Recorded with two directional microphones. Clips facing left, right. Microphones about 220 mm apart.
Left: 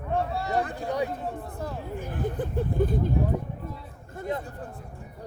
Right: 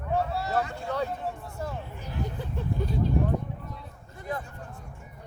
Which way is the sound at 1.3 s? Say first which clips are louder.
Left 2 dB; 55° left (ahead or behind).